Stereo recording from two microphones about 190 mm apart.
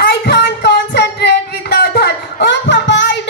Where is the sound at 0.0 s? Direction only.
60° left (ahead or behind).